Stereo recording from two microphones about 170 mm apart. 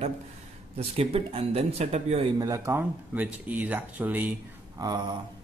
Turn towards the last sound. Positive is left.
turn(degrees=-25)  # may be behind; listen again after turning